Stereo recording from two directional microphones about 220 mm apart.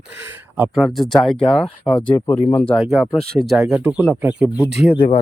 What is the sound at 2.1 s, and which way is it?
Speech, 20° left (ahead or behind).